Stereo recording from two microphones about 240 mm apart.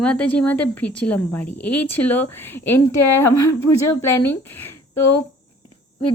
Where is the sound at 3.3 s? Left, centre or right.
Left.